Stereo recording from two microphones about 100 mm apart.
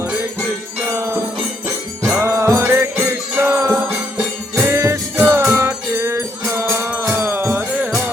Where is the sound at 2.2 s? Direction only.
30° right (ahead or behind).